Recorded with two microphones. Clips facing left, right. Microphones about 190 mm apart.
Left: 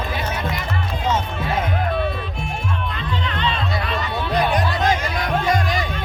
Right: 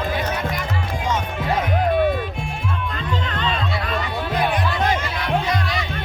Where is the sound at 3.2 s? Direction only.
45° right (ahead or behind).